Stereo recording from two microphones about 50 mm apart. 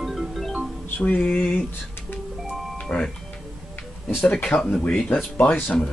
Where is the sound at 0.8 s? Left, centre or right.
Left.